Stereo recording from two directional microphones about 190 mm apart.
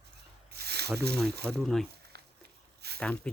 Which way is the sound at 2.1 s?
60° right (ahead or behind).